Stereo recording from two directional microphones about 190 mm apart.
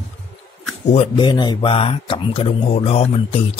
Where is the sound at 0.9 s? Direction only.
30° left (ahead or behind).